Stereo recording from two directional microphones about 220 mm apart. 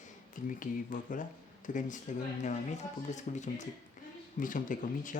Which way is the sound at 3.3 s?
35° left (ahead or behind).